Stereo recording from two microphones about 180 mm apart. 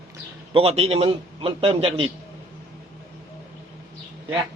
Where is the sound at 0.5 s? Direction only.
35° right (ahead or behind).